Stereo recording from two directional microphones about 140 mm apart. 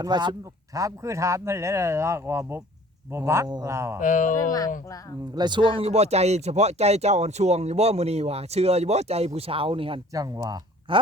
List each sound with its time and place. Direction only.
0.0 s speech: 30° right (ahead or behind)
4.0 s speech: 65° left (ahead or behind)
4.4 s speech: 25° left (ahead or behind)
5.3 s speech: 30° right (ahead or behind)
10.1 s speech: 25° right (ahead or behind)
10.9 s speech: 40° right (ahead or behind)